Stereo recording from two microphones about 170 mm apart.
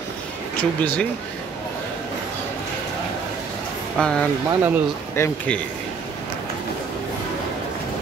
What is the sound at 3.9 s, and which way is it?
Speech, 5° left (ahead or behind).